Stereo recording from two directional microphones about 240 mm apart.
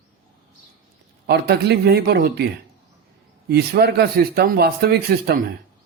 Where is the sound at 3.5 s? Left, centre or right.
Right.